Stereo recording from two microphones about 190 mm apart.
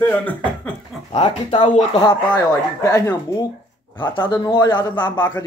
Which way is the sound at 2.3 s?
15° left (ahead or behind).